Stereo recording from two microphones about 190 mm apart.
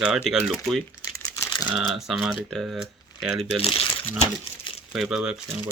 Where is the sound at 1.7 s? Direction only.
Centre (ahead or behind).